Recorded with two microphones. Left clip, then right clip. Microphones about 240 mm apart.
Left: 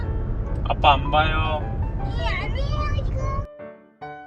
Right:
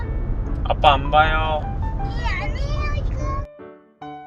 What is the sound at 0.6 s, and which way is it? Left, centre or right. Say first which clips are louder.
Music: right 2 dB; centre.